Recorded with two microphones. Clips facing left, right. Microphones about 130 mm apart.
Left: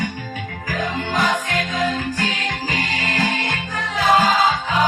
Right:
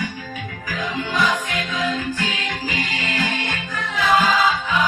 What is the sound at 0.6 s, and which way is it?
Music, 40° left (ahead or behind).